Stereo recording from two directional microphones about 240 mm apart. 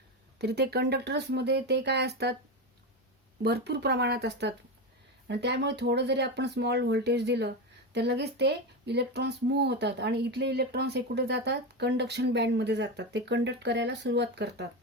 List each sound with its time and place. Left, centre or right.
0.3 s speech: right
3.4 s speech: right